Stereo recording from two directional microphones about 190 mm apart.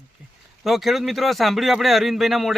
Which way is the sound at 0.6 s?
Centre (ahead or behind).